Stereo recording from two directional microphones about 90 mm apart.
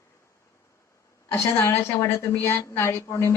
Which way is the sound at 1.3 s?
25° left (ahead or behind).